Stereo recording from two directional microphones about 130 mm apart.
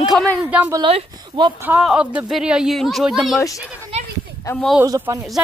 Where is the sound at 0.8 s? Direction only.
40° right (ahead or behind).